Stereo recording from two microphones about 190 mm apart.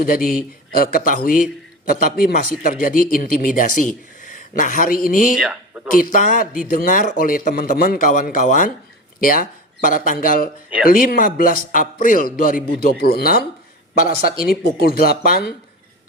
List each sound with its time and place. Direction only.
0.0 s a man's voice: 50° left (ahead or behind)
4.2 s a sound: 45° left (ahead or behind)
5.0 s a man's voice: 45° left (ahead or behind)
5.4 s speech: 5° right (ahead or behind)
6.0 s a man's voice: 45° left (ahead or behind)